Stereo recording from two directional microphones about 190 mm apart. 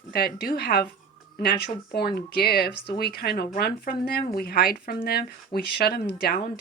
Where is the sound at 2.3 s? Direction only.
55° left (ahead or behind).